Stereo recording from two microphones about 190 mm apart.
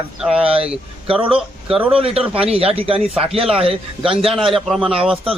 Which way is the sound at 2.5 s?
30° right (ahead or behind).